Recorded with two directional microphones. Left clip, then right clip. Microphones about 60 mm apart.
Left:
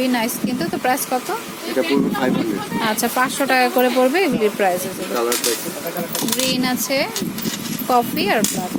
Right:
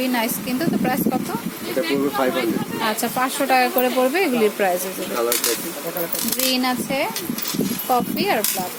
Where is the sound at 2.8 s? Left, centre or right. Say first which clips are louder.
Left 3 dB; left.